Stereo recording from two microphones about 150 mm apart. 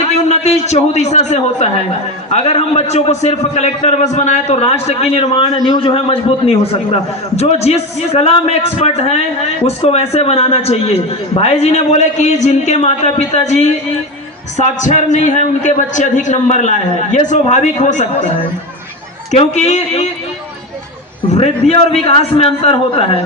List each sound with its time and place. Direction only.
0.0 s a man's voice: 45° left (ahead or behind)
19.3 s a man's voice: 50° left (ahead or behind)
21.3 s a man's voice: 45° left (ahead or behind)